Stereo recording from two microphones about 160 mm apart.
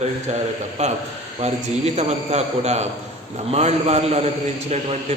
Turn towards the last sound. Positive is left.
turn(degrees=-40)  # may be behind; listen again after turning